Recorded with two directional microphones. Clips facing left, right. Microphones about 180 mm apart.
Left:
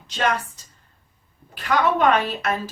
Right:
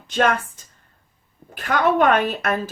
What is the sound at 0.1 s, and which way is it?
A woman's voice, 50° right (ahead or behind).